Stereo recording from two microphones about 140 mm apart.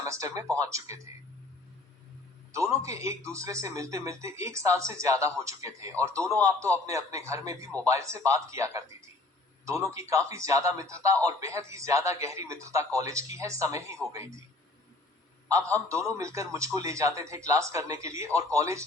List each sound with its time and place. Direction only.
0.0 s speech: 20° right (ahead or behind)
2.5 s speech: 20° right (ahead or behind)
15.4 s speech: 20° right (ahead or behind)